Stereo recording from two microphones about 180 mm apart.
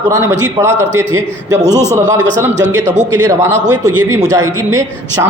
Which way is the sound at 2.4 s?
15° right (ahead or behind).